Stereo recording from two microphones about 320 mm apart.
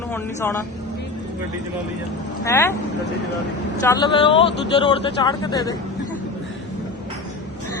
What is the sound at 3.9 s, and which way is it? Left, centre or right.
Speech, centre.